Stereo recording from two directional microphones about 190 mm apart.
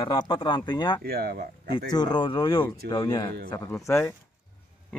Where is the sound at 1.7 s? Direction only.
20° left (ahead or behind).